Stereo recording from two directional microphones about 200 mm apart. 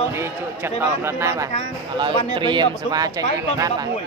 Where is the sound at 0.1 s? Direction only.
10° right (ahead or behind).